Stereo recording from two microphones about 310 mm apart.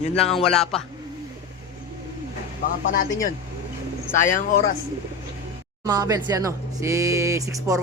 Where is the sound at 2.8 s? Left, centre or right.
Left.